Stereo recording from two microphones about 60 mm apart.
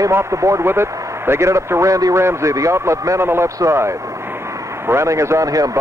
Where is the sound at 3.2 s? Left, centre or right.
Right.